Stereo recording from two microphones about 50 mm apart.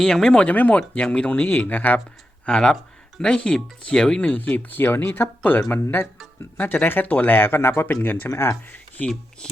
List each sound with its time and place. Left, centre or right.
0.0 s speech: centre
0.3 s speech: left
2.5 s speech: centre
4.4 s speech: left
4.8 s speech: left
8.3 s speech: left